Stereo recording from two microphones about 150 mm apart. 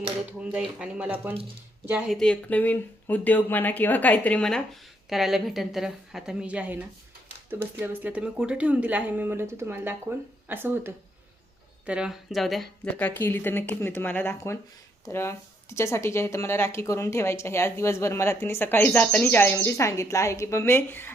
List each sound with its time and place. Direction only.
0.3 s speech: 10° right (ahead or behind)
13.0 s speech: 15° left (ahead or behind)